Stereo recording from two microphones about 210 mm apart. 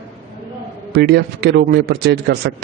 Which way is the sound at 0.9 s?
50° right (ahead or behind).